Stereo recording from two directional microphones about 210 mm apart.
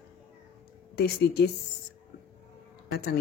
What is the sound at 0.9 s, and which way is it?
Speech, 50° left (ahead or behind).